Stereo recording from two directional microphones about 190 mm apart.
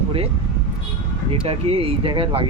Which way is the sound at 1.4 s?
30° right (ahead or behind).